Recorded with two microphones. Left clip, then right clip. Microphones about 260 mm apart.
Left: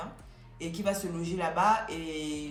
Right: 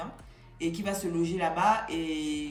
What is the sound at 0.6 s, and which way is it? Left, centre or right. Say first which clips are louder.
Speech: even; centre.